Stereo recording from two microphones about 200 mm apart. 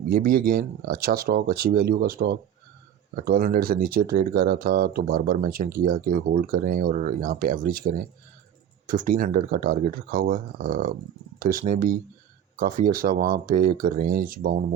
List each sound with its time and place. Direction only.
0.1 s speech: 45° right (ahead or behind)